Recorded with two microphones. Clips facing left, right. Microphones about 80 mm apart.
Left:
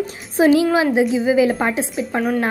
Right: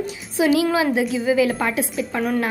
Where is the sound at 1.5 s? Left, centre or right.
Left.